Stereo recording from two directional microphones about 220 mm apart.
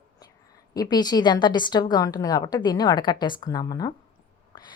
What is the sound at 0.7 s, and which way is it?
Speech, 15° left (ahead or behind).